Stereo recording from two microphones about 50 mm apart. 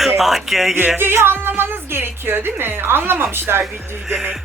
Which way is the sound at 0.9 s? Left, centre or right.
Right.